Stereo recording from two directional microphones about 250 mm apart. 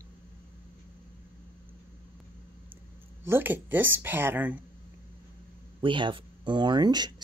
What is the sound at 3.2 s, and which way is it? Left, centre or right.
Speech, centre.